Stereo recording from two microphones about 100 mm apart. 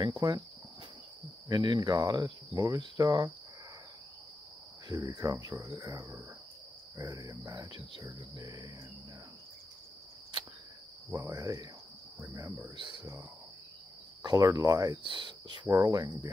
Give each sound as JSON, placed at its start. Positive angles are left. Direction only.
{"t": 0.2, "sound": "cricket", "side_deg": -40}
{"t": 1.5, "sound": "cricket", "side_deg": -45}
{"t": 4.8, "sound": "cricket", "side_deg": -45}
{"t": 11.2, "sound": "cricket", "side_deg": -35}
{"t": 12.7, "sound": "cricket", "side_deg": -55}
{"t": 14.2, "sound": "cricket", "side_deg": -35}
{"t": 15.0, "sound": "speech", "side_deg": -50}
{"t": 15.7, "sound": "cricket", "side_deg": -35}